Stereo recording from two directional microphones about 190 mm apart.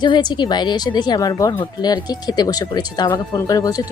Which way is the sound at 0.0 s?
25° left (ahead or behind).